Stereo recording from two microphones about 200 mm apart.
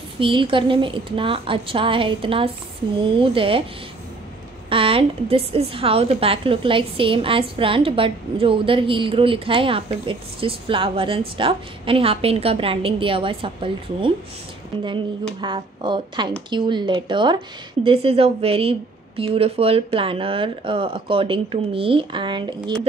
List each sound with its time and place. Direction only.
0.2 s a woman's voice: 25° right (ahead or behind)
4.6 s a woman's voice: 25° right (ahead or behind)
15.4 s a woman's voice: 25° right (ahead or behind)